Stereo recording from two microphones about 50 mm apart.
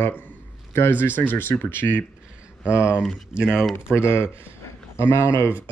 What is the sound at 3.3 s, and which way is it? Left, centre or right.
Speech, centre.